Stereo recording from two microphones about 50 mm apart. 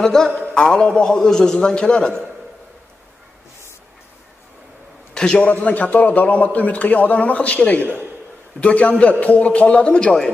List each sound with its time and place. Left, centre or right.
0.0 s a man's voice: centre
5.1 s a sound: centre
5.4 s a man's voice: left